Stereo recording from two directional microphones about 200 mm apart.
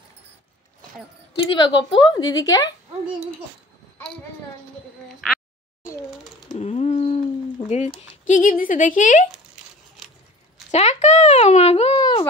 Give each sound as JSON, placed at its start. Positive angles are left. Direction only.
{"t": 1.6, "sound": "a woman's voice", "side_deg": 25}
{"t": 5.0, "sound": "speech", "side_deg": 0}
{"t": 6.6, "sound": "a sound", "side_deg": 30}
{"t": 8.3, "sound": "speech", "side_deg": 40}
{"t": 10.0, "sound": "keys jangling", "side_deg": 0}
{"t": 10.7, "sound": "speech", "side_deg": 35}